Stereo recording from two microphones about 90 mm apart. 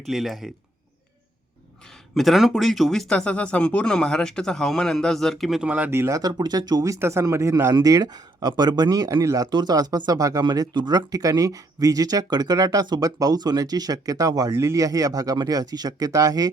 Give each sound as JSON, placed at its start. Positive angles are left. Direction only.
{"t": 0.0, "sound": "speech", "side_deg": 0}
{"t": 2.1, "sound": "speech", "side_deg": 0}
{"t": 5.6, "sound": "speech", "side_deg": -15}
{"t": 5.9, "sound": "speech", "side_deg": -30}
{"t": 9.5, "sound": "speech", "side_deg": -50}
{"t": 10.4, "sound": "speech", "side_deg": -55}
{"t": 14.5, "sound": "speech", "side_deg": -30}